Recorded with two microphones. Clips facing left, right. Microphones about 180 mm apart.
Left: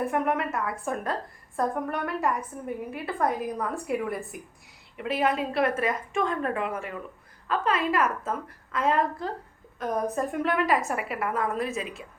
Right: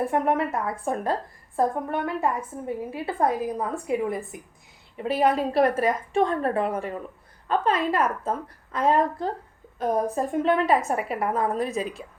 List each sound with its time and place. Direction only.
0.0 s a woman's voice: 35° right (ahead or behind)
4.9 s a woman's voice: 35° right (ahead or behind)